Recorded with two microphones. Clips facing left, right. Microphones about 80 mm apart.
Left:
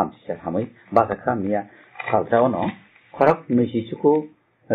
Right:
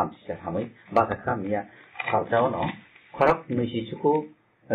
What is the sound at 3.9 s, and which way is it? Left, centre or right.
Speech, centre.